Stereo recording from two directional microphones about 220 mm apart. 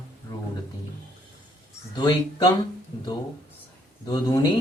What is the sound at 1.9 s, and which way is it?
Speech, 20° left (ahead or behind).